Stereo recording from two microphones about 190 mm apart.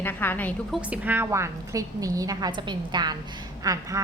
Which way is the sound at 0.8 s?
10° right (ahead or behind).